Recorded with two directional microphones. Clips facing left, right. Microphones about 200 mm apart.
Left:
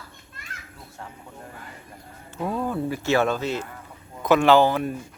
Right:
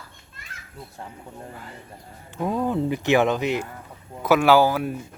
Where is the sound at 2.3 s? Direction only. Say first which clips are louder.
Right 3 dB; 15° right (ahead or behind).